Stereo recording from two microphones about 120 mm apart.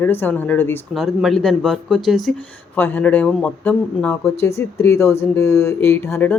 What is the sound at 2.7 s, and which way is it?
Speech, 15° left (ahead or behind).